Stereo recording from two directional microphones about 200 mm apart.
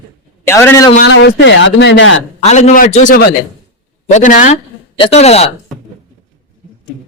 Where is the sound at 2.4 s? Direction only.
35° left (ahead or behind).